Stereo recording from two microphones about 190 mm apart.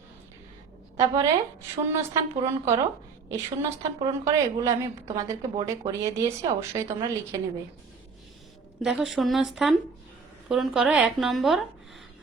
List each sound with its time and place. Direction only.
0.9 s a woman's voice: 15° right (ahead or behind)
8.8 s speech: 5° right (ahead or behind)